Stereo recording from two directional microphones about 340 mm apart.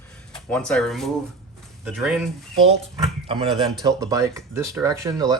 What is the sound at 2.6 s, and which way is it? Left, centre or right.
Speech, centre.